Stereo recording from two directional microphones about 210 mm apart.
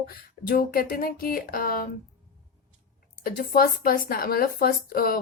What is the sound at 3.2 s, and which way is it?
A woman's voice, 45° left (ahead or behind).